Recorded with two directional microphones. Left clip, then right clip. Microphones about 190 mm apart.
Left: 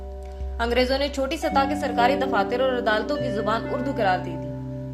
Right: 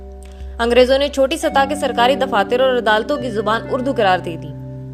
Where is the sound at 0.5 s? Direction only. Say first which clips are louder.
Right 10 dB; 40° right (ahead or behind).